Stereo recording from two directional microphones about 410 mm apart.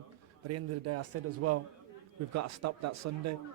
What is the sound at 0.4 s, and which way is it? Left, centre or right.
A man's voice, right.